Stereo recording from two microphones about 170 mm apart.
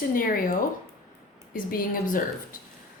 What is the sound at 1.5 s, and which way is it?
Speech, 55° left (ahead or behind).